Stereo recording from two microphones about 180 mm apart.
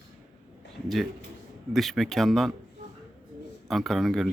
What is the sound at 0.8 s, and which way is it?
Speech, centre (ahead or behind).